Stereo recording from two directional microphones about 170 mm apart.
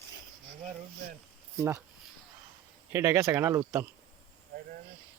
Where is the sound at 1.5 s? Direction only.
15° right (ahead or behind).